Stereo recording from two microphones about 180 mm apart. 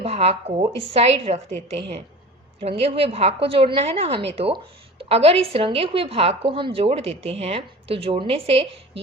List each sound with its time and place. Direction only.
0.0 s speech: 35° right (ahead or behind)
2.8 s speech: 35° right (ahead or behind)